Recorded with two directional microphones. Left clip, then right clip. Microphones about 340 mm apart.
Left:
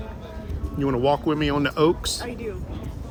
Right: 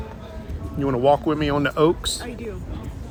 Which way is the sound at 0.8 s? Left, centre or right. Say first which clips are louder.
Right 3 dB; centre.